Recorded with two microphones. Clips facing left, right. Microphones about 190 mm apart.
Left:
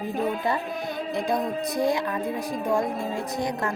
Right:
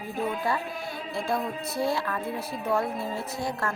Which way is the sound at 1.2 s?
15° left (ahead or behind).